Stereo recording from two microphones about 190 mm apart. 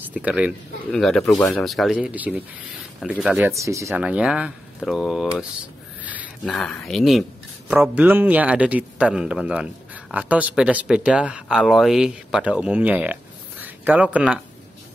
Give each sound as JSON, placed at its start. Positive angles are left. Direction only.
{"t": 0.1, "sound": "speech", "side_deg": -5}
{"t": 1.2, "sound": "speech", "side_deg": 15}
{"t": 1.5, "sound": "speech", "side_deg": 0}